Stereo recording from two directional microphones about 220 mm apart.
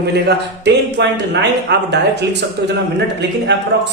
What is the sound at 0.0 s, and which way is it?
A man's voice, 50° right (ahead or behind).